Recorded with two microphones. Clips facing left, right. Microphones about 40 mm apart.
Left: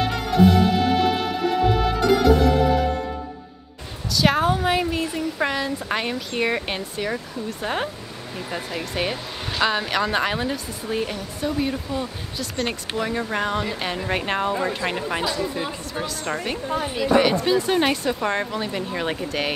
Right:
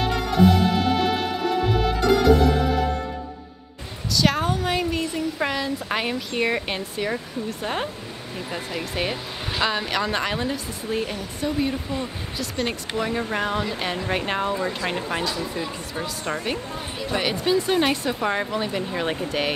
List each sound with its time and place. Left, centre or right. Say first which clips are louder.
0.0 s music: left 1 dB; centre
4.1 s speech: left 2 dB; centre
16.7 s speech: left 7 dB; left
17.2 s speech: left 3 dB; centre